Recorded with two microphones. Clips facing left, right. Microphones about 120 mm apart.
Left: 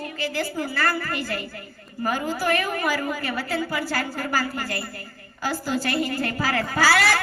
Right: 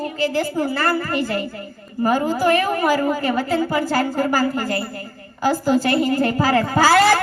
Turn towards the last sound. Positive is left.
turn(degrees=-20)  # may be behind; listen again after turning